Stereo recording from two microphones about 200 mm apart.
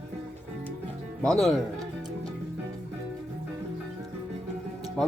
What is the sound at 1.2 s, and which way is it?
Speech, centre (ahead or behind).